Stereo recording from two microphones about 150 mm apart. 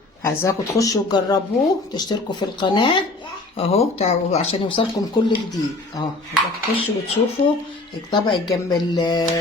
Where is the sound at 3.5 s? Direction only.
40° left (ahead or behind).